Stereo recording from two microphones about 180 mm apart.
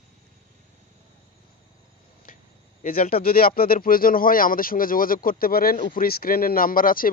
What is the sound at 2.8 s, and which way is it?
Speech, 50° left (ahead or behind).